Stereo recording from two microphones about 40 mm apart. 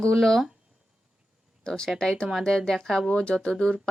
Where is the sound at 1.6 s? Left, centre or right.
Centre.